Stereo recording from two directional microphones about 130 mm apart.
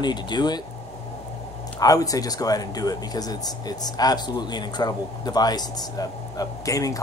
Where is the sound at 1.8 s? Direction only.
30° left (ahead or behind).